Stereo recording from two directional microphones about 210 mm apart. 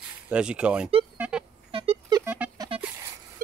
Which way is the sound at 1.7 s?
25° right (ahead or behind).